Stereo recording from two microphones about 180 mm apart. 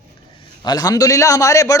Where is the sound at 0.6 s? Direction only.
20° left (ahead or behind).